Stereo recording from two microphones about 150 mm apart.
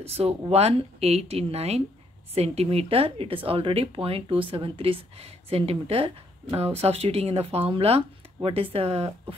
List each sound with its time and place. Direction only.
0.0 s speech: 40° right (ahead or behind)